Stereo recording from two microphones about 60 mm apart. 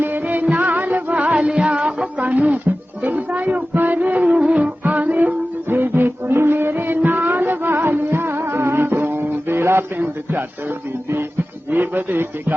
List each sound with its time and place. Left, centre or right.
0.0 s music: right
5.6 s music: right
11.7 s a man's voice: right